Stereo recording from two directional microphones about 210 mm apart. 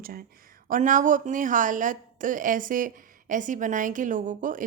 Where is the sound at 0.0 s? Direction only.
45° right (ahead or behind).